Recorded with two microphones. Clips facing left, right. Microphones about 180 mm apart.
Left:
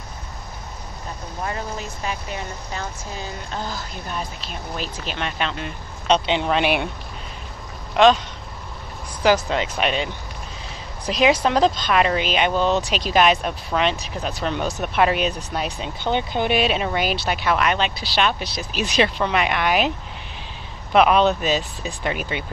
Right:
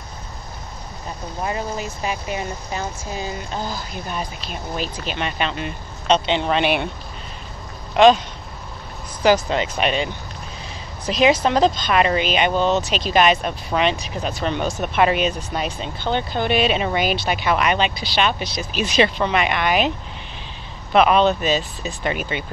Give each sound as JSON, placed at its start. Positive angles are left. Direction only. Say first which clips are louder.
{"t": 1.4, "sound": "speech", "louder": "right 3 dB", "side_deg": -15}
{"t": 7.9, "sound": "speech", "louder": "right 2 dB", "side_deg": -5}
{"t": 9.2, "sound": "speech", "louder": "right 2 dB", "side_deg": 0}
{"t": 11.1, "sound": "speech", "louder": "right 1 dB", "side_deg": 5}
{"t": 16.0, "sound": "speech", "louder": "even", "side_deg": 15}
{"t": 20.9, "sound": "speech", "louder": "right 1 dB", "side_deg": 0}